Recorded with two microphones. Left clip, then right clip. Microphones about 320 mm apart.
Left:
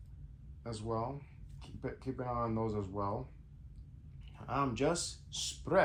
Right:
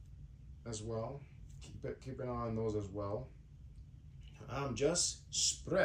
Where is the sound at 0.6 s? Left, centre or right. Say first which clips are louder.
Left 4 dB; centre.